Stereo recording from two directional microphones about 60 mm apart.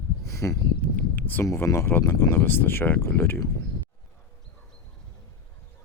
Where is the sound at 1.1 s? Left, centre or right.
Left.